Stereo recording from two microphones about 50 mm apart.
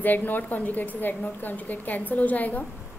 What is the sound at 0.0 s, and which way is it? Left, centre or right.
A woman's voice, left.